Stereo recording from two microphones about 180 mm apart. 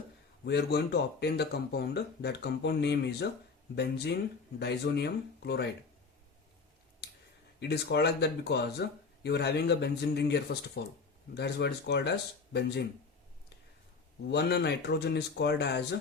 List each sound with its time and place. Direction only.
0.4 s speech: 70° left (ahead or behind)
7.6 s speech: 65° left (ahead or behind)
14.3 s speech: 70° left (ahead or behind)